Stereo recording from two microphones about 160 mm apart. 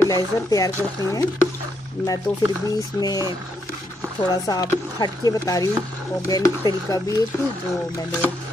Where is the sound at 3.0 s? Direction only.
20° left (ahead or behind).